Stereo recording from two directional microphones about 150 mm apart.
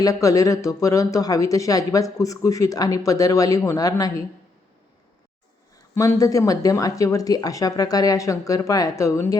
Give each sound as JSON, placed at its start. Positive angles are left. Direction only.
{"t": 0.0, "sound": "a woman's voice", "side_deg": 20}
{"t": 5.9, "sound": "a woman's voice", "side_deg": 20}